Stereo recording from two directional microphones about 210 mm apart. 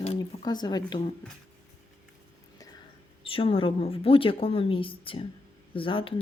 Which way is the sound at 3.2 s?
25° left (ahead or behind).